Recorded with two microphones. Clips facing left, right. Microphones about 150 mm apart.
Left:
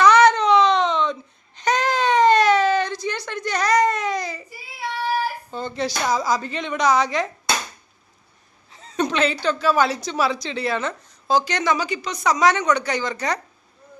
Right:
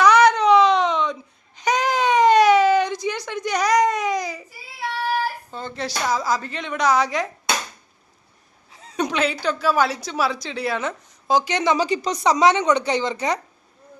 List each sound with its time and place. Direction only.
0.0 s baby cry: 10° right (ahead or behind)
1.5 s wail: 10° right (ahead or behind)
5.5 s a sound: centre (ahead or behind)
6.1 s speech: centre (ahead or behind)
8.7 s a woman's voice: 10° right (ahead or behind)